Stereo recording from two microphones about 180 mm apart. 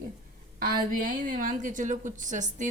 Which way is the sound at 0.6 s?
50° right (ahead or behind).